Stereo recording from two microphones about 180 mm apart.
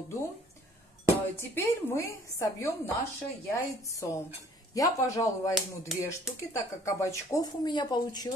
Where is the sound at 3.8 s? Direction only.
15° left (ahead or behind).